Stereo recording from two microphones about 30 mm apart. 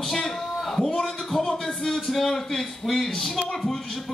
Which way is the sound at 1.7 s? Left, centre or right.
Centre.